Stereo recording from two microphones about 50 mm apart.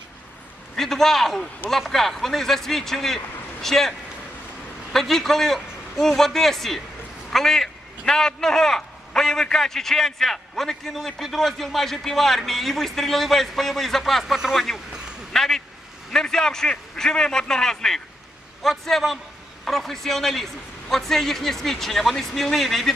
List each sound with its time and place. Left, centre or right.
0.8 s a man's voice: centre
14.3 s speech: centre
15.3 s a sound: centre
16.1 s a man's voice: centre